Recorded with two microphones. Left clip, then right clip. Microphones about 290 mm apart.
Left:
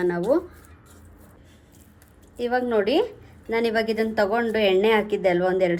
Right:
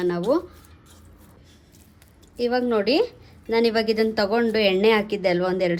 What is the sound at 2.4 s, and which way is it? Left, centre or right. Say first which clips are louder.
A woman's voice: even; right.